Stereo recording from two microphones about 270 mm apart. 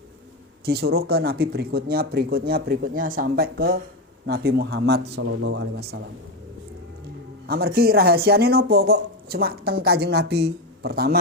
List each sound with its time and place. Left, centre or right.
0.6 s speech: right
7.4 s speech: right